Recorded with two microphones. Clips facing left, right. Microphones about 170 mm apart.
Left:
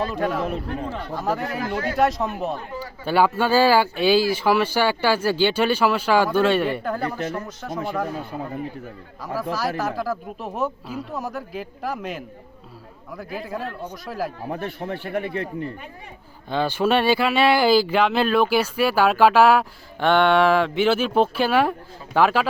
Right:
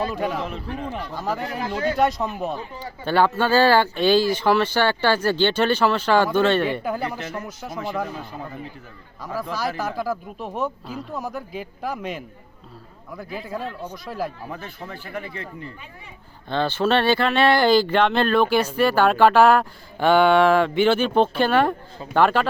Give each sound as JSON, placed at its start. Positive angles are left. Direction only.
{"t": 0.1, "sound": "speech", "side_deg": 0}
{"t": 0.4, "sound": "a man's voice", "side_deg": 45}
{"t": 1.1, "sound": "speech", "side_deg": 0}
{"t": 6.8, "sound": "speech", "side_deg": -10}
{"t": 9.2, "sound": "speech", "side_deg": 5}
{"t": 14.4, "sound": "a man's voice", "side_deg": 45}
{"t": 14.8, "sound": "speech", "side_deg": 60}
{"t": 16.5, "sound": "speech", "side_deg": 10}